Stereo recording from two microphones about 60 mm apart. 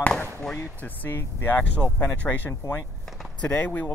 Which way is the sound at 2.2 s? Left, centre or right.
Left.